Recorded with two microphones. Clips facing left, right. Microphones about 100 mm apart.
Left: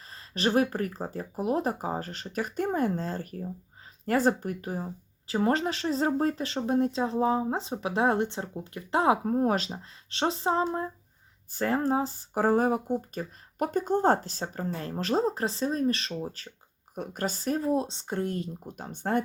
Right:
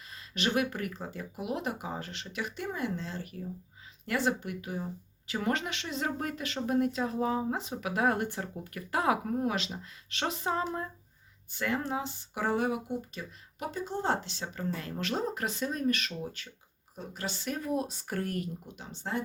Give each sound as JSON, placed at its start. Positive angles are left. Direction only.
{"t": 0.1, "sound": "speech", "side_deg": 35}
{"t": 16.9, "sound": "speech", "side_deg": 60}
{"t": 17.2, "sound": "speech", "side_deg": 40}
{"t": 18.8, "sound": "speech", "side_deg": 50}